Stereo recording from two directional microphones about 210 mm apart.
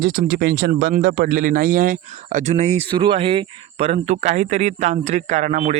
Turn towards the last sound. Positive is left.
turn(degrees=-35)  # may be behind; listen again after turning